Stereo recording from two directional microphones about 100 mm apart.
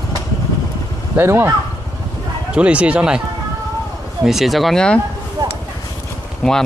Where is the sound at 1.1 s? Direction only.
25° right (ahead or behind).